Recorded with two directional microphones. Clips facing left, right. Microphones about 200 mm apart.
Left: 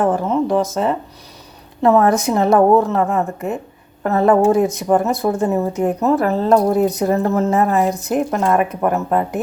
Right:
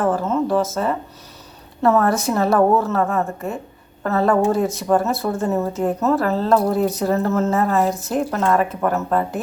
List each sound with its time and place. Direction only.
0.0 s speech: 15° left (ahead or behind)